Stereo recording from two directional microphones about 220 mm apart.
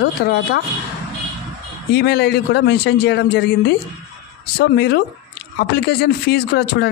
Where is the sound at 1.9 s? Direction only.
45° left (ahead or behind).